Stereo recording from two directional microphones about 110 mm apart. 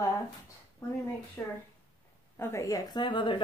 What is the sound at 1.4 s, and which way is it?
Speech, 20° left (ahead or behind).